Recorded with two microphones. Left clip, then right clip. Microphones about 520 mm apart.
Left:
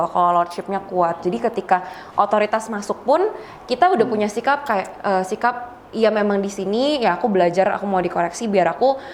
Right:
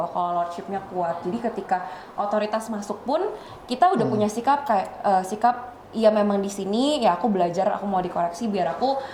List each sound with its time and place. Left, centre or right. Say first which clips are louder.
0.2 s a woman's voice: left 9 dB; left